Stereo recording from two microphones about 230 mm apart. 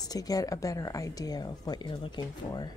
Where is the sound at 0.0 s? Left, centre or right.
Centre.